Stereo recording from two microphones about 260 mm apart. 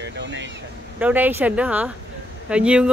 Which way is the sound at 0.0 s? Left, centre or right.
Right.